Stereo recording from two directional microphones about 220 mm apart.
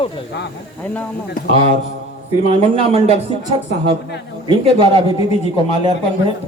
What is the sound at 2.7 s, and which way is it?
Speech, 25° right (ahead or behind).